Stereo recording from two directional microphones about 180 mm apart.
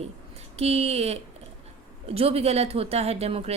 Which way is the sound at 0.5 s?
35° right (ahead or behind).